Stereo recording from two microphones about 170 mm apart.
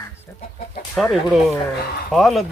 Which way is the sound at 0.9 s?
Centre (ahead or behind).